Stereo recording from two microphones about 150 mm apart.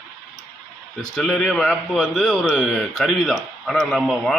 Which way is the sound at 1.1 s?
5° left (ahead or behind).